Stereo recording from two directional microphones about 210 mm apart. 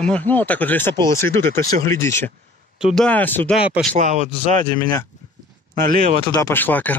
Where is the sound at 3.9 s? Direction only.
35° right (ahead or behind).